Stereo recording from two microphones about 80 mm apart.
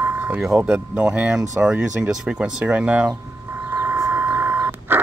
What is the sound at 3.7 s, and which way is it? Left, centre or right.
Vehicle, right.